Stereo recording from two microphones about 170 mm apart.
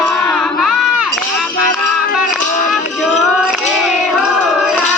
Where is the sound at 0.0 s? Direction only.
5° left (ahead or behind).